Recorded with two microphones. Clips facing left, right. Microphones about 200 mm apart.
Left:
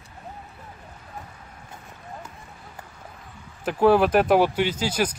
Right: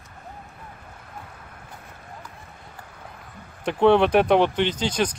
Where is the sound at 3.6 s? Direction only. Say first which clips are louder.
Right 1 dB; 5° left (ahead or behind).